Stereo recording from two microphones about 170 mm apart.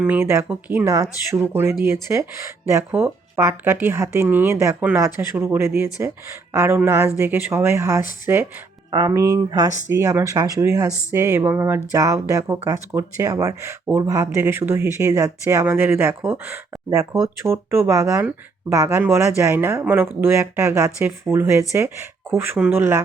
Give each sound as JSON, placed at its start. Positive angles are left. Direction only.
{"t": 0.0, "sound": "speech", "side_deg": -10}